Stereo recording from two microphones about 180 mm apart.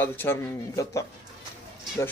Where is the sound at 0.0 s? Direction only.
10° left (ahead or behind).